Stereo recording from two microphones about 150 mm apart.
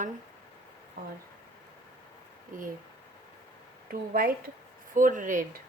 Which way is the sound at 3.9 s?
75° right (ahead or behind).